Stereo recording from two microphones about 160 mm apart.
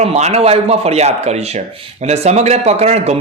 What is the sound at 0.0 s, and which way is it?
A man's voice, 40° right (ahead or behind).